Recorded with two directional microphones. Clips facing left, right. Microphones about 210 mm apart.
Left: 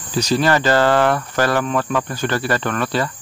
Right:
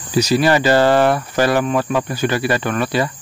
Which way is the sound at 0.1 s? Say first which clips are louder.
Right 2 dB; 10° right (ahead or behind).